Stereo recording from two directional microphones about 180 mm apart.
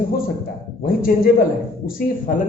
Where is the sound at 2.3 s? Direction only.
50° left (ahead or behind).